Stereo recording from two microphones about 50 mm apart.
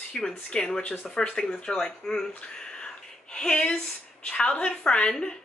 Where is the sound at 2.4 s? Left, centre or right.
Centre.